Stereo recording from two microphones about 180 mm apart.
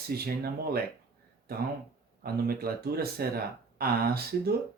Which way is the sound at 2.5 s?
55° right (ahead or behind).